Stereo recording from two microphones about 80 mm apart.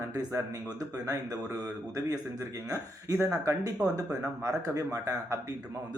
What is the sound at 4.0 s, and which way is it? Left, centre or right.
A man's voice, right.